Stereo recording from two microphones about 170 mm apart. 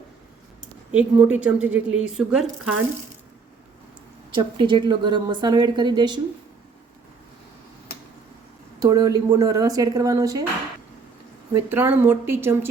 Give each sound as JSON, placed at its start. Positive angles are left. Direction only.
{"t": 0.9, "sound": "a woman's voice", "side_deg": -5}
{"t": 4.4, "sound": "a woman's voice", "side_deg": -25}
{"t": 8.8, "sound": "a woman's voice", "side_deg": -20}
{"t": 11.5, "sound": "a woman's voice", "side_deg": -10}